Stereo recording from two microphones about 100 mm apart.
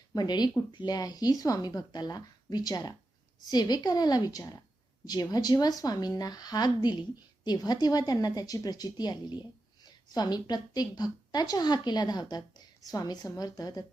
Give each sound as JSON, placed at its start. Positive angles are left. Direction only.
{"t": 0.1, "sound": "speech", "side_deg": 40}